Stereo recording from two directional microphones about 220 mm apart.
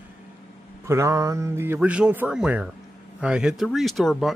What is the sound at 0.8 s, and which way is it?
Speech, 15° right (ahead or behind).